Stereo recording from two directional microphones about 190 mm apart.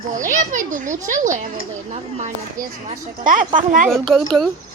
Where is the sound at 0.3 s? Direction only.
40° right (ahead or behind).